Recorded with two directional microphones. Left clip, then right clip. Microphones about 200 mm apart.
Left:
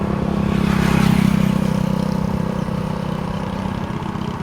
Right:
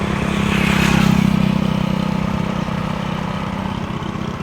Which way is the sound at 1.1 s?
Centre (ahead or behind).